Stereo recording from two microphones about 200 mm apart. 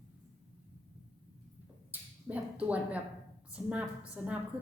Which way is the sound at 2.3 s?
5° right (ahead or behind).